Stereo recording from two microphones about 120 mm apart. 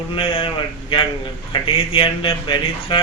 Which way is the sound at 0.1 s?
50° left (ahead or behind).